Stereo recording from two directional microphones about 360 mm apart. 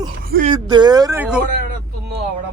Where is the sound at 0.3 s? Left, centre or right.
Right.